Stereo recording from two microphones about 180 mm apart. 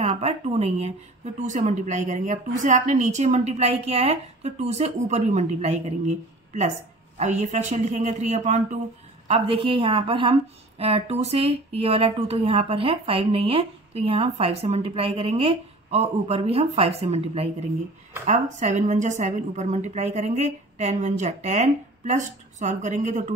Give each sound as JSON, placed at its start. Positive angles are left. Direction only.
{"t": 0.0, "sound": "a woman's voice", "side_deg": -35}